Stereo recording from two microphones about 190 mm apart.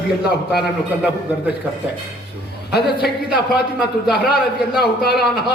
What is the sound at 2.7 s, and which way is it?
Speech, 60° left (ahead or behind).